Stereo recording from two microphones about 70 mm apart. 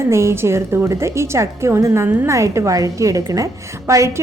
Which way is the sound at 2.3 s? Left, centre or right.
Right.